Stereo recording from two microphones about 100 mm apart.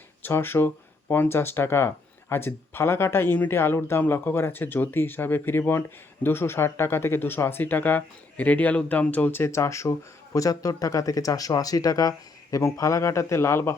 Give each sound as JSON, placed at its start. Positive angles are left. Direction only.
{"t": 0.2, "sound": "speech", "side_deg": 25}